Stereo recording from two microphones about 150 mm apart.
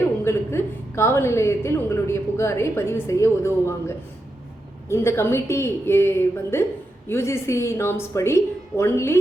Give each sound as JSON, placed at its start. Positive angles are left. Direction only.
{"t": 0.3, "sound": "a woman's voice", "side_deg": 15}